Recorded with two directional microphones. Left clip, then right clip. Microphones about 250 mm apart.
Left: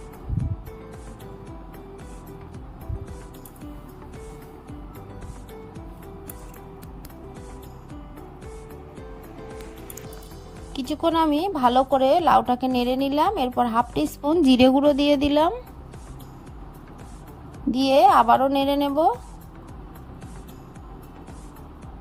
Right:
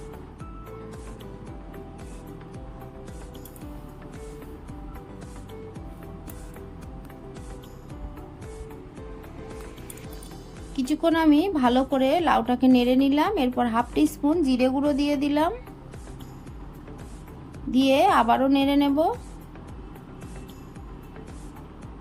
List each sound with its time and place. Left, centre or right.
10.8 s speech: left
17.7 s speech: left